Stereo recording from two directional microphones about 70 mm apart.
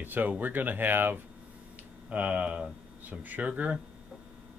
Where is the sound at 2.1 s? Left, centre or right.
Centre.